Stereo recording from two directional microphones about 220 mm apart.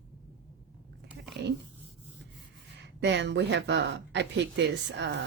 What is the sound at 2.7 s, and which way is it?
Speech, 50° right (ahead or behind).